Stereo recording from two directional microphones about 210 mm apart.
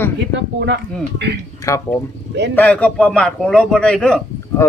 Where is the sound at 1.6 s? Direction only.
15° left (ahead or behind).